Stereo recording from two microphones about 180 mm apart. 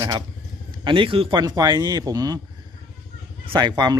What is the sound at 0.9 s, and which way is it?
Speech, 30° right (ahead or behind).